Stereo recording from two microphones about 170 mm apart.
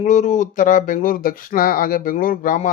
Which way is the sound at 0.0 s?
45° left (ahead or behind).